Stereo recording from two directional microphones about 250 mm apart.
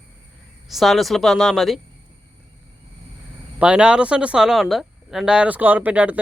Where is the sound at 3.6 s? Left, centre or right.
Centre.